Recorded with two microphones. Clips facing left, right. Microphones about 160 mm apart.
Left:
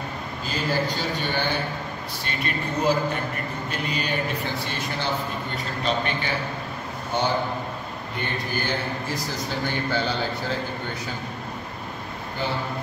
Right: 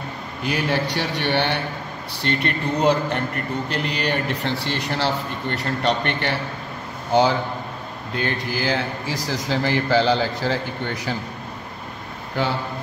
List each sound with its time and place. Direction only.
0.5 s a man's voice: 70° right (ahead or behind)
7.1 s a man's voice: 90° right